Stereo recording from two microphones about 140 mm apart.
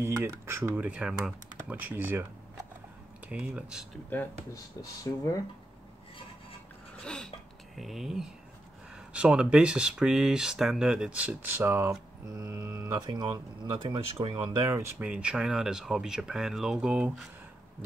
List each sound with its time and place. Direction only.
0.0 s speech: 15° right (ahead or behind)
3.3 s speech: 10° right (ahead or behind)
5.1 s speech: 20° left (ahead or behind)
7.0 s a sound: 5° left (ahead or behind)
7.7 s speech: centre (ahead or behind); by 14.0 s 35° right (ahead or behind)
14.3 s speech: 20° right (ahead or behind); by 17.3 s 5° right (ahead or behind)